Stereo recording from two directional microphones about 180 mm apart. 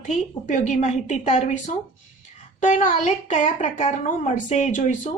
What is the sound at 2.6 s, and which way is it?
A woman's voice, 45° left (ahead or behind).